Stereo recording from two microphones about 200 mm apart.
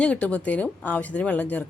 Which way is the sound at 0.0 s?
5° left (ahead or behind).